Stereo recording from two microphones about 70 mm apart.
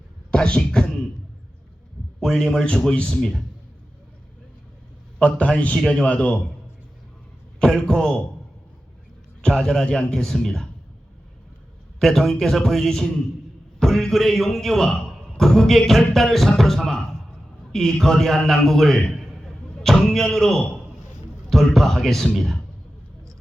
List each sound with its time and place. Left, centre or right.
0.3 s speech: centre
2.2 s a man's voice: centre
5.2 s a man's voice: centre
7.6 s a man's voice: centre
9.4 s a man's voice: centre
11.9 s speech: centre